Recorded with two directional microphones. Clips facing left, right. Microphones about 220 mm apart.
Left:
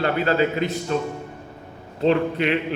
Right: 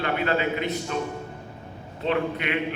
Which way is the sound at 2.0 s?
35° left (ahead or behind).